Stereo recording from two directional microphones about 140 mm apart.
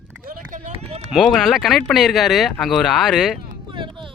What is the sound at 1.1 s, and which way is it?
Speech, centre (ahead or behind).